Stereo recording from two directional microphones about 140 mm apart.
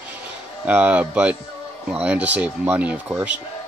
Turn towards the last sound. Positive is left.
turn(degrees=-10)  # may be behind; listen again after turning